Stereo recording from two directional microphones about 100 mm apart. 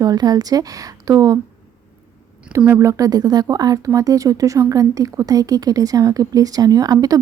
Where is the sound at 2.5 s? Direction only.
30° right (ahead or behind).